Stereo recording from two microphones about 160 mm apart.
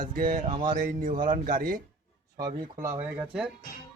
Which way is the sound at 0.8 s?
60° right (ahead or behind).